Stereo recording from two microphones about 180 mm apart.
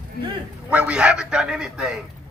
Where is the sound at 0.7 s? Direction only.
5° right (ahead or behind).